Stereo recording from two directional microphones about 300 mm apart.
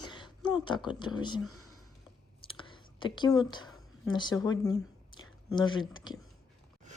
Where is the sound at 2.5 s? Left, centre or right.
Centre.